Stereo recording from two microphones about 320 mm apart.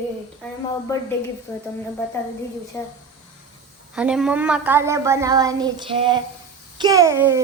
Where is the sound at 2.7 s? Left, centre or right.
Centre.